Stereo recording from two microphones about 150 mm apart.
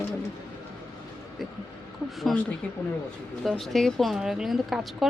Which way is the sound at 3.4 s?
Centre (ahead or behind).